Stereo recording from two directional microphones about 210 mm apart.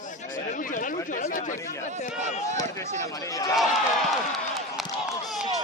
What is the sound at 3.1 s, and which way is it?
Chatter, 15° left (ahead or behind).